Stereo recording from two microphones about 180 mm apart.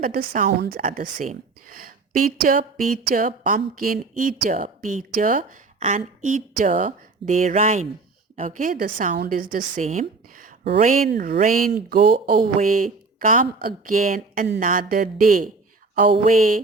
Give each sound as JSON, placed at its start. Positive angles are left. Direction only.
{"t": 0.0, "sound": "a woman's voice", "side_deg": -55}